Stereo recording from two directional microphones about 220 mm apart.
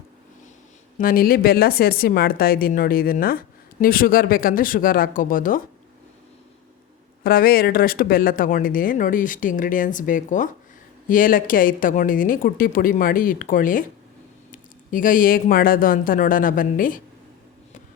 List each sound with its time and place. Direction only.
0.9 s speech: 40° left (ahead or behind)
7.3 s speech: 40° left (ahead or behind)